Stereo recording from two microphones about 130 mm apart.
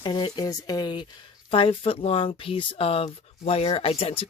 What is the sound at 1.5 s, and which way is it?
Speech, 45° left (ahead or behind).